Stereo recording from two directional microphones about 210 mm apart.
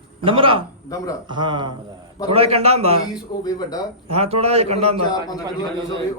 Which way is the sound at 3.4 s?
20° left (ahead or behind).